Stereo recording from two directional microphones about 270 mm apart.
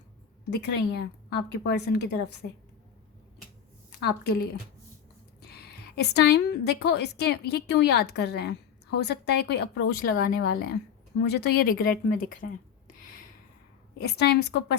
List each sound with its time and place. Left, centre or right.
0.5 s a woman's voice: left
3.9 s a woman's voice: left
5.5 s a woman's voice: left
14.0 s a woman's voice: left